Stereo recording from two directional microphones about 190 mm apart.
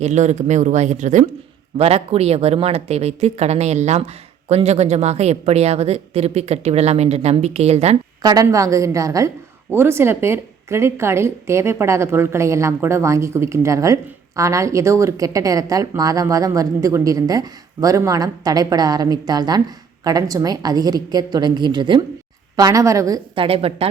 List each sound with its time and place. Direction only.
0.0 s speech: 35° right (ahead or behind)
8.2 s a woman's voice: 20° right (ahead or behind)